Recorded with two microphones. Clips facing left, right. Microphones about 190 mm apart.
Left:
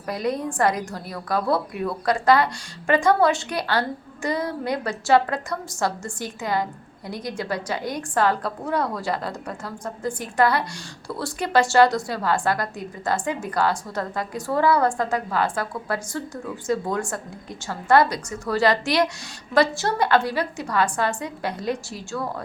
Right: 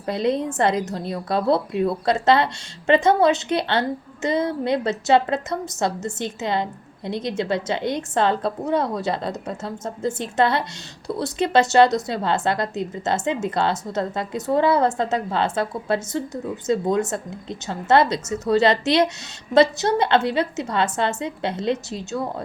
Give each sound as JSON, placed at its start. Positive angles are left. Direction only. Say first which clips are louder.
{"t": 0.0, "sound": "a woman's voice", "louder": "right 4 dB", "side_deg": -25}